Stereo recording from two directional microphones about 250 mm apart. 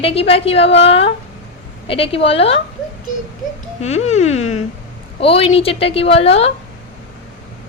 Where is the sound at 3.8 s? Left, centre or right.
Left.